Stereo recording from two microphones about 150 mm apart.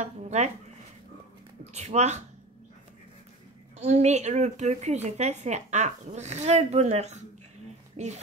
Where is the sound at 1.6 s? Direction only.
50° right (ahead or behind).